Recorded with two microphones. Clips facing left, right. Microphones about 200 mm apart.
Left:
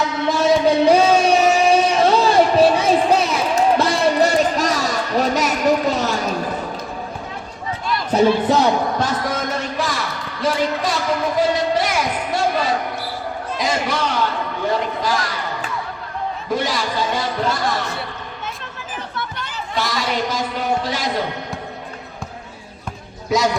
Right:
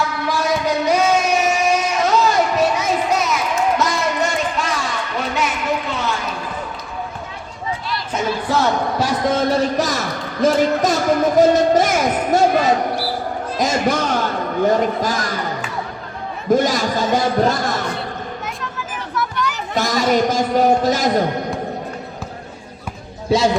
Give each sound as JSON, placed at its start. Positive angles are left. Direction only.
{"t": 0.0, "sound": "music", "side_deg": 20}
{"t": 8.1, "sound": "a sound", "side_deg": 35}
{"t": 8.4, "sound": "speech", "side_deg": 20}
{"t": 9.2, "sound": "a sound", "side_deg": -30}
{"t": 16.5, "sound": "a man's voice", "side_deg": -45}
{"t": 19.1, "sound": "chatter", "side_deg": 30}
{"t": 19.7, "sound": "a man's voice", "side_deg": -45}
{"t": 23.3, "sound": "speech", "side_deg": -30}